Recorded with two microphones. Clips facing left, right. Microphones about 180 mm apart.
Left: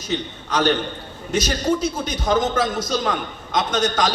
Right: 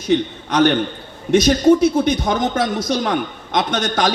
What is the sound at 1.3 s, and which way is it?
Speech, 60° right (ahead or behind).